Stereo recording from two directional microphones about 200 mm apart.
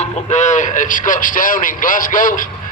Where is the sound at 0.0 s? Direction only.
35° left (ahead or behind).